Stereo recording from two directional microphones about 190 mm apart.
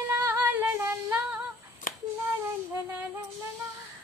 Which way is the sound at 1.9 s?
45° left (ahead or behind).